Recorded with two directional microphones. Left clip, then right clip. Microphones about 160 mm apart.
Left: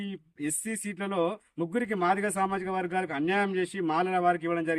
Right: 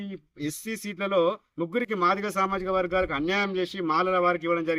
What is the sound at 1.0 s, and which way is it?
Speech, 35° left (ahead or behind).